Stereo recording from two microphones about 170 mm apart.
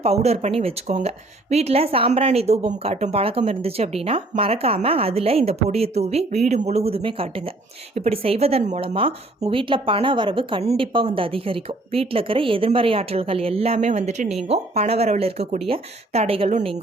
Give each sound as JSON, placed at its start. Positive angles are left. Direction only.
{"t": 0.0, "sound": "a woman's voice", "side_deg": -40}